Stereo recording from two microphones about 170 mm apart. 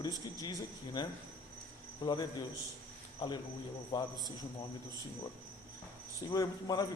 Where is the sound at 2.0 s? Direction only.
25° left (ahead or behind).